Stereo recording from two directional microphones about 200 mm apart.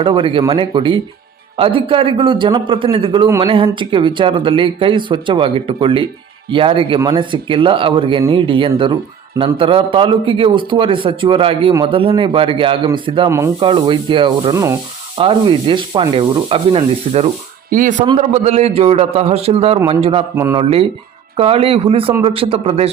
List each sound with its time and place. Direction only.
0.0 s a man's voice: 25° right (ahead or behind)
17.7 s a man's voice: 40° right (ahead or behind)
20.3 s speech: 15° right (ahead or behind)
20.6 s a man's voice: 30° right (ahead or behind)